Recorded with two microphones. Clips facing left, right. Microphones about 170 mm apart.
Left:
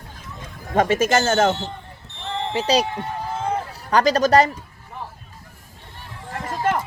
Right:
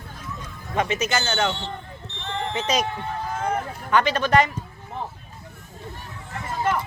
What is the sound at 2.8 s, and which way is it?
Speech, 15° left (ahead or behind).